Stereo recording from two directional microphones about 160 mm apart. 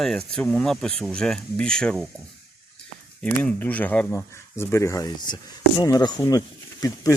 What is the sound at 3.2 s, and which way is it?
Speech, 10° left (ahead or behind).